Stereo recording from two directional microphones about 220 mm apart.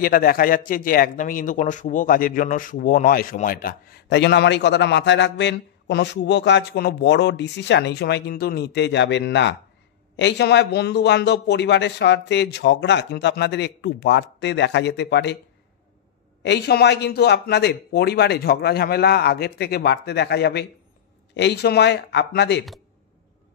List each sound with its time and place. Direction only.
0.0 s speech: 40° left (ahead or behind)
16.4 s speech: 50° left (ahead or behind)